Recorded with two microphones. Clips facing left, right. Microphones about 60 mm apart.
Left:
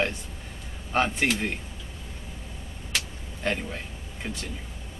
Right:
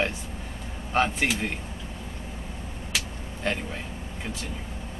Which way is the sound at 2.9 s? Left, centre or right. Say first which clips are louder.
Even; centre.